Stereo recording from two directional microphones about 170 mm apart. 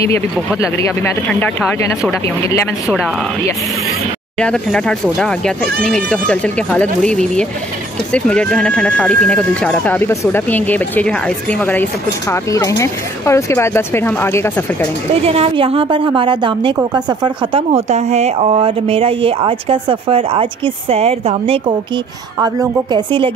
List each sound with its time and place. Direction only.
0.0 s speech: 15° left (ahead or behind)
4.4 s speech: 5° left (ahead or behind)
15.2 s a woman's voice: 35° right (ahead or behind)